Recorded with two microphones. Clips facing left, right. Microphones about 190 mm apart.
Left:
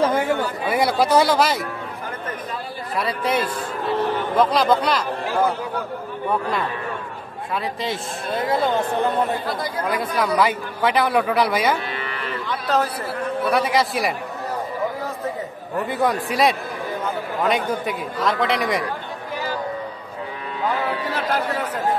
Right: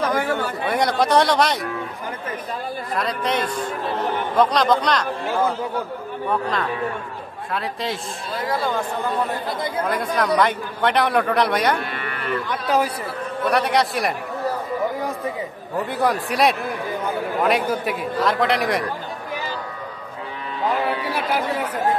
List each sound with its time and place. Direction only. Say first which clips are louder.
0.0 s a sound: left 2 dB; 25° left (ahead or behind)
0.7 s a man's voice: left 1 dB; 5° left (ahead or behind)
3.0 s a man's voice: left 2 dB; 5° left (ahead or behind)
7.5 s a man's voice: left 1 dB; centre (ahead or behind)
8.4 s speech: left 3 dB; 25° left (ahead or behind)
10.1 s a man's voice: right 1 dB; centre (ahead or behind)
11.8 s moo: even; 50° right (ahead or behind)
12.6 s a man's voice: right 1 dB; 10° right (ahead or behind)
13.4 s a man's voice: right 1 dB; centre (ahead or behind)
15.7 s a man's voice: even; centre (ahead or behind)
21.0 s a man's voice: even; 10° right (ahead or behind)